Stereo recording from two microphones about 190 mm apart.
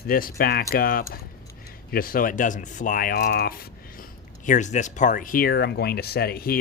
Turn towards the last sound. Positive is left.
turn(degrees=50)  # may be behind; listen again after turning